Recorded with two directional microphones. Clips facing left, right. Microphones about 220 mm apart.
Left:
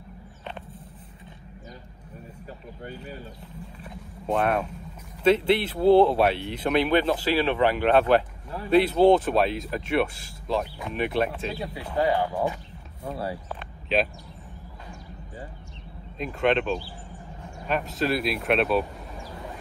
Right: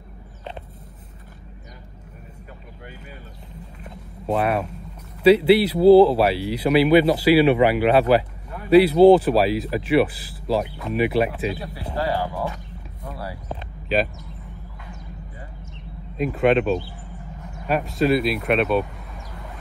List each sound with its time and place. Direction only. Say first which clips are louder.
4.3 s speech: right 2 dB; 5° right (ahead or behind)
12.0 s speech: left 1 dB; 20° left (ahead or behind)
13.9 s speech: right 3 dB; centre (ahead or behind)
16.2 s speech: right 5 dB; 5° right (ahead or behind)